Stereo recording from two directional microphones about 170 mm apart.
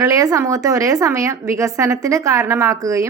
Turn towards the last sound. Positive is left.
turn(degrees=-20)  # may be behind; listen again after turning